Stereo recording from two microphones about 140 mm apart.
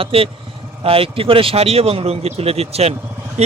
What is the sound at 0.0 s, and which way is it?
Speech, 40° right (ahead or behind).